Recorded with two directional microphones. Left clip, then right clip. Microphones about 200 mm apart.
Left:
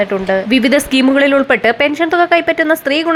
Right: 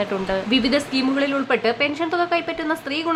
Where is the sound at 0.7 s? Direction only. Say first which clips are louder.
Left 9 dB; 35° left (ahead or behind).